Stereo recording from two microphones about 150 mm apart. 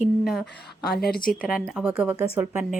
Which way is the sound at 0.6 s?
90° left.